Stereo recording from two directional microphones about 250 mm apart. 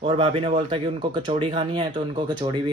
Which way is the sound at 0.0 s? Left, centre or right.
Right.